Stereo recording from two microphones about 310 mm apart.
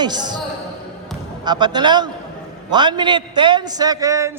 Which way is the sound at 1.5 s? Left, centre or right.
Centre.